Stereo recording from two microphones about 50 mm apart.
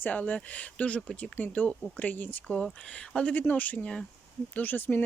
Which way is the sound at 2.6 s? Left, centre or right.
Centre.